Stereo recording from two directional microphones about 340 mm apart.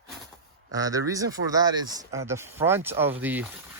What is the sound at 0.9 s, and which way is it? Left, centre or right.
Speech, centre.